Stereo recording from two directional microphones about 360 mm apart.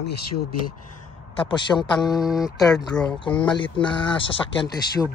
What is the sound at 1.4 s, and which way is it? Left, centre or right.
Speech, centre.